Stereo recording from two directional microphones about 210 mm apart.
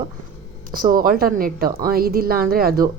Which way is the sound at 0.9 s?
45° right (ahead or behind).